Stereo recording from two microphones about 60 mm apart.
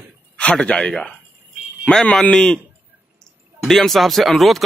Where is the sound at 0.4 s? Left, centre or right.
Centre.